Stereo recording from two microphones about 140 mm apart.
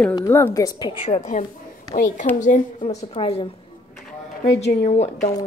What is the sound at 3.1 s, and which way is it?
Speech, 40° left (ahead or behind).